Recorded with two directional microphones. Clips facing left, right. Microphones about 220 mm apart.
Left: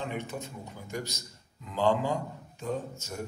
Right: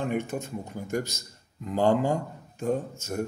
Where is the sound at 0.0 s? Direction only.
50° right (ahead or behind).